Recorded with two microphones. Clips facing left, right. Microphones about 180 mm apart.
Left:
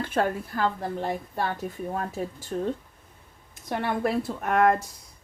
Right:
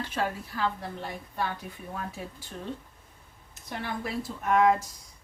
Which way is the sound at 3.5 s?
55° left (ahead or behind).